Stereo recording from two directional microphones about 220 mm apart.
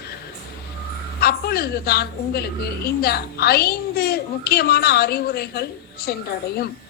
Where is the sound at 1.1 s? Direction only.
45° left (ahead or behind).